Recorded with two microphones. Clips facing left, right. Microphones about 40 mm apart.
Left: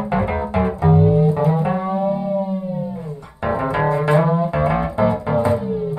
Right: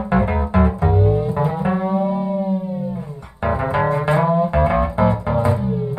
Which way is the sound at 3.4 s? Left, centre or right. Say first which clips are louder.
Even; centre.